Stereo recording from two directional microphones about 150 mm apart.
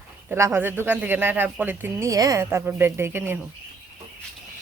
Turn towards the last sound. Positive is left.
turn(degrees=-15)  # may be behind; listen again after turning